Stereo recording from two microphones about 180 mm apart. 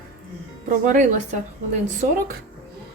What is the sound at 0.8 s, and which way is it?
Speech, 45° right (ahead or behind).